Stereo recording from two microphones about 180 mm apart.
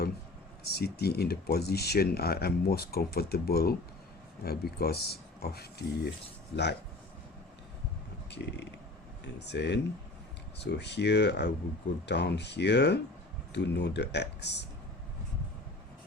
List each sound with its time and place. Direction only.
0.7 s speech: 65° left (ahead or behind)
8.3 s speech: 70° left (ahead or behind)